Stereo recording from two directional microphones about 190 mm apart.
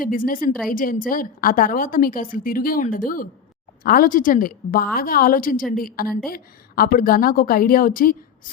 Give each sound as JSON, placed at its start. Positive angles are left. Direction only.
{"t": 0.0, "sound": "a woman's voice", "side_deg": 50}